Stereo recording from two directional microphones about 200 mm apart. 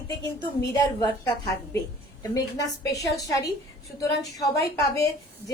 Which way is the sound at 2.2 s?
15° left (ahead or behind).